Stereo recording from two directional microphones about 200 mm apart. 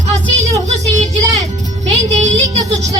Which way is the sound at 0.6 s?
35° right (ahead or behind).